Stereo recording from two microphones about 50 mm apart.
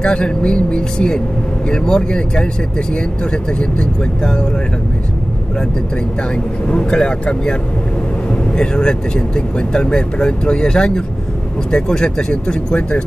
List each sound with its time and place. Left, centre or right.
0.0 s speech: centre
6.7 s speech: centre